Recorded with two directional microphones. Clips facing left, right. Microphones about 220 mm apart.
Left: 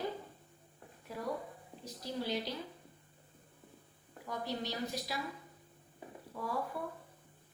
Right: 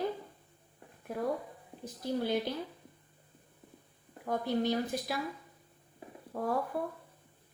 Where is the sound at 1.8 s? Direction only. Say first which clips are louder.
Right 6 dB; 55° right (ahead or behind).